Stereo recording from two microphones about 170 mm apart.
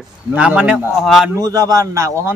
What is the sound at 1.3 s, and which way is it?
A man's voice, 20° right (ahead or behind).